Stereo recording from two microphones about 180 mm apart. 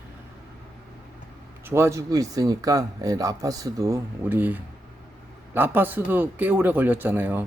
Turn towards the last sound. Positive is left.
turn(degrees=-10)  # may be behind; listen again after turning